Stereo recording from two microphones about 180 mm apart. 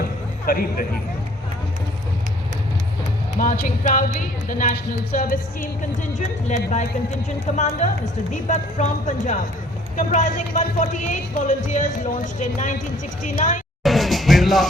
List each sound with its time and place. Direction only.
0.4 s speech: 55° left (ahead or behind)
3.3 s speech: 50° left (ahead or behind)
6.1 s speech: 40° left (ahead or behind)
13.8 s music: centre (ahead or behind)